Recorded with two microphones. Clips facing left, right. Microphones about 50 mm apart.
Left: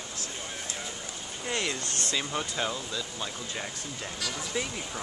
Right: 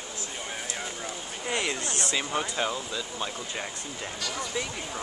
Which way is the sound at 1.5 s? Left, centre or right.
Centre.